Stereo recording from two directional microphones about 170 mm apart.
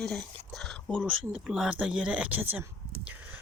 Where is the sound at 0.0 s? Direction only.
5° left (ahead or behind).